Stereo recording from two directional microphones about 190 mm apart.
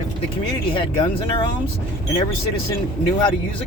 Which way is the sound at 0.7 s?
25° left (ahead or behind).